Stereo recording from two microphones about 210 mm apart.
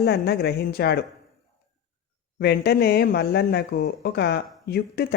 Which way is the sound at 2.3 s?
50° left (ahead or behind).